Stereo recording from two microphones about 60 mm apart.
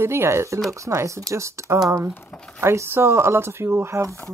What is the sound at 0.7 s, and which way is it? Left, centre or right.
Speech, right.